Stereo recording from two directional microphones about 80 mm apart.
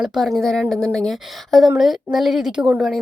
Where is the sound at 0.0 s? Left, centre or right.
Centre.